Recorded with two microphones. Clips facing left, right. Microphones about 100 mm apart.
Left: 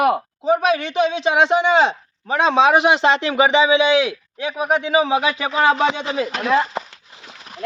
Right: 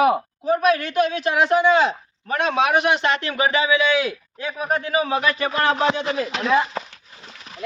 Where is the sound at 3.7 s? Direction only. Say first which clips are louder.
Left 4 dB; 90° left.